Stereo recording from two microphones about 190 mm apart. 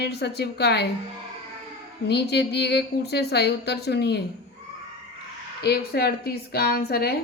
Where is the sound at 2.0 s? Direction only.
60° left (ahead or behind).